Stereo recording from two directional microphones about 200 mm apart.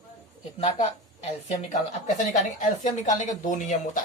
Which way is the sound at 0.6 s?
30° left (ahead or behind).